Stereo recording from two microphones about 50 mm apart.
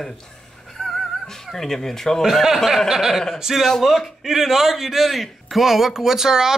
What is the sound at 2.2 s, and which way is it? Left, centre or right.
A man's voice, centre.